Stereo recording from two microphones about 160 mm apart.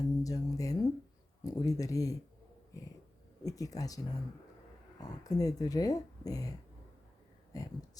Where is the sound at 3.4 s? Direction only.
20° left (ahead or behind).